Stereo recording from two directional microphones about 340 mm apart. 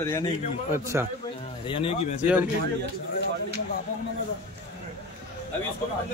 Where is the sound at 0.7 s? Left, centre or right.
Centre.